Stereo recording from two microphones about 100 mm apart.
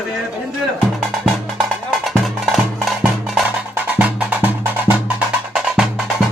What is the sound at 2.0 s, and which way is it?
Music, centre (ahead or behind).